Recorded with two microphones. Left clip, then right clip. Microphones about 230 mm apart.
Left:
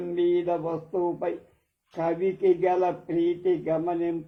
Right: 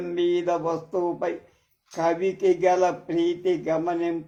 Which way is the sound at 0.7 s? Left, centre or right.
Right.